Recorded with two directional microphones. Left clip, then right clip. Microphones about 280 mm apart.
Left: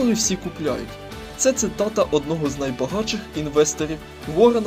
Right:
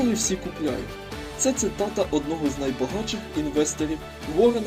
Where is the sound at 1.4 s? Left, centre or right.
Left.